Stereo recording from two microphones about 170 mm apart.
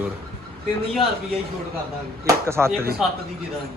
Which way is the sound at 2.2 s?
15° right (ahead or behind).